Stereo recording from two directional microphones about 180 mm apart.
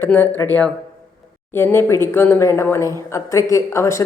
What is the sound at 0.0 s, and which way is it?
Speech, 10° left (ahead or behind).